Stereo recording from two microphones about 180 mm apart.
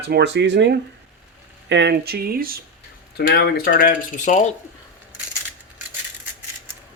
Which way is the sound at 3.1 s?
60° left (ahead or behind).